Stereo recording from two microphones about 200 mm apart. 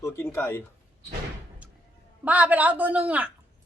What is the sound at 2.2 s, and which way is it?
A woman's voice, 5° right (ahead or behind).